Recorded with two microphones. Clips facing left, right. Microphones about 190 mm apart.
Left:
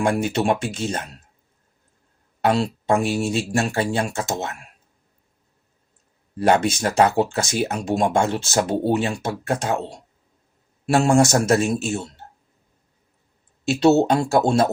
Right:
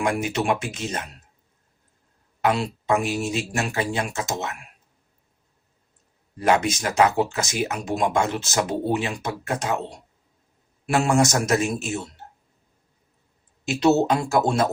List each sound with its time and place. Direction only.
0.0 s speech: 30° left (ahead or behind)
2.4 s speech: 30° left (ahead or behind)
6.4 s speech: 30° left (ahead or behind)
10.9 s speech: 30° left (ahead or behind)
13.7 s speech: 30° left (ahead or behind)